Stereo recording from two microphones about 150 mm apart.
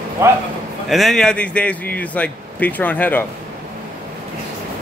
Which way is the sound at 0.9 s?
Centre (ahead or behind).